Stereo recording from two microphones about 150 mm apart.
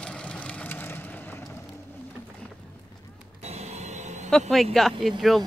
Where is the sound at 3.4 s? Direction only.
45° right (ahead or behind).